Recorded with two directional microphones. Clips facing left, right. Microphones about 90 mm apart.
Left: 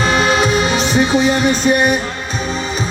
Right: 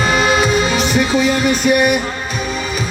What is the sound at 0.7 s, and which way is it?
Music, 30° left (ahead or behind).